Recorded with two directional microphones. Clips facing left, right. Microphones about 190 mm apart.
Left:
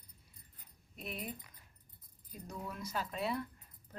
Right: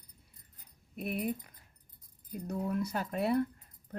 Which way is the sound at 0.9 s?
55° right (ahead or behind).